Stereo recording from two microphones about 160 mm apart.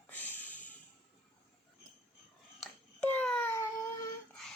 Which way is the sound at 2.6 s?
10° left (ahead or behind).